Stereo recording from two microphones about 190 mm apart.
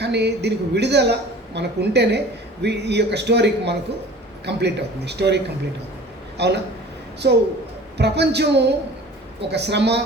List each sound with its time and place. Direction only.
0.0 s a woman's voice: 60° right (ahead or behind)